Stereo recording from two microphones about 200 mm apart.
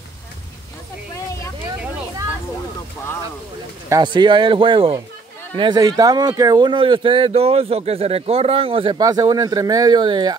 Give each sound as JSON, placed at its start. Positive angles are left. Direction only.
{"t": 3.9, "sound": "speech", "side_deg": -20}